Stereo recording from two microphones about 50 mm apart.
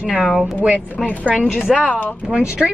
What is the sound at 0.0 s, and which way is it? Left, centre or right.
Speech, centre.